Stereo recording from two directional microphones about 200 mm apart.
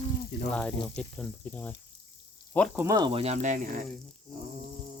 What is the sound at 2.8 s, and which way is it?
Speech, 20° right (ahead or behind).